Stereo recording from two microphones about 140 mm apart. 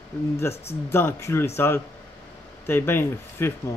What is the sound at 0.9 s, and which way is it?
Speech, 15° left (ahead or behind).